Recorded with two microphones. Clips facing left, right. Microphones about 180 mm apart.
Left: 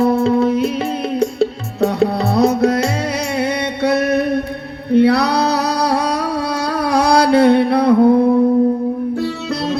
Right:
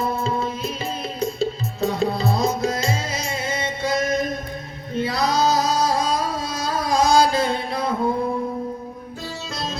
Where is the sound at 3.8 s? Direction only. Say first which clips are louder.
Left 7 dB; 65° left (ahead or behind).